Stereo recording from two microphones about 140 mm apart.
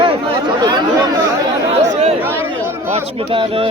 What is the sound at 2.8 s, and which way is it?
Speech, 50° right (ahead or behind).